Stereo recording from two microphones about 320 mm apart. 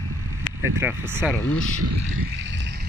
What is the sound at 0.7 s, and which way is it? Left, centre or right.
Speech, centre.